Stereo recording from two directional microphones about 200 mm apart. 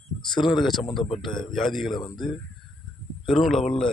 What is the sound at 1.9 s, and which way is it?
Speech, 20° left (ahead or behind).